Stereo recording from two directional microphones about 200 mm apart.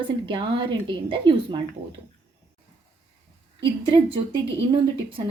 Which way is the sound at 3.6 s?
25° right (ahead or behind).